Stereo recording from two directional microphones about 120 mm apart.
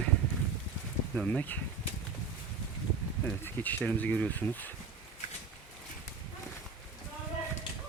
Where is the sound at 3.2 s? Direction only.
15° left (ahead or behind).